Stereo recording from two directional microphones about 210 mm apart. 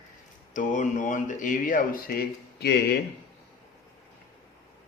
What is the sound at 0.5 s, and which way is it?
Speech, 35° left (ahead or behind).